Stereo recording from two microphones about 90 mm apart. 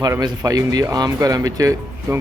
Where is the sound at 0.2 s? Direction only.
45° right (ahead or behind).